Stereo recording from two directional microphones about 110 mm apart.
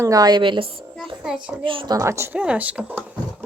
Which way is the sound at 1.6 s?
50° right (ahead or behind).